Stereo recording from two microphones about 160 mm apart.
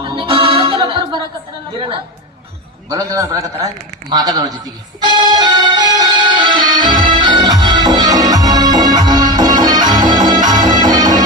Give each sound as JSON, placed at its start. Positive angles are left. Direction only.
{"t": 0.0, "sound": "music", "side_deg": -30}
{"t": 2.9, "sound": "a man's voice", "side_deg": -25}
{"t": 4.1, "sound": "music", "side_deg": -25}